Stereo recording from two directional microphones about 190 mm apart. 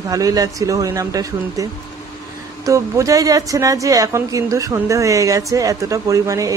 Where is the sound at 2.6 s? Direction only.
15° right (ahead or behind).